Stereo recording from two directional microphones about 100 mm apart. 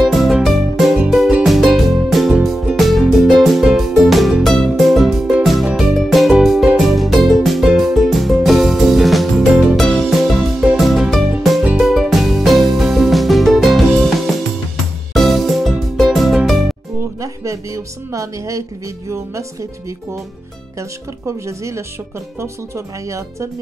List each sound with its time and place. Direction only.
0.0 s music: centre (ahead or behind)
17.2 s music: 30° right (ahead or behind)
21.5 s speech: 30° right (ahead or behind)